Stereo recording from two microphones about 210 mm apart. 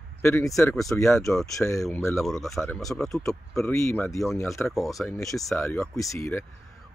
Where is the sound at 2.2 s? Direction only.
Centre (ahead or behind).